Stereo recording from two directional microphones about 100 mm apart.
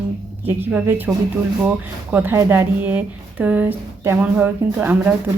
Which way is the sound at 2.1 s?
15° right (ahead or behind).